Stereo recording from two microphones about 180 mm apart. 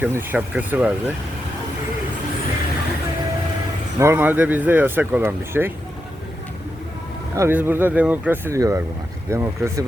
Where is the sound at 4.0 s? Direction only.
10° right (ahead or behind).